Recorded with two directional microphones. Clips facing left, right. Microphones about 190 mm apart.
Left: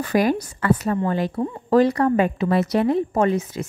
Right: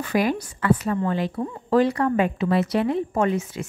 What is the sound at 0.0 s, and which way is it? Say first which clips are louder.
A woman's voice: left 3 dB; 40° left (ahead or behind).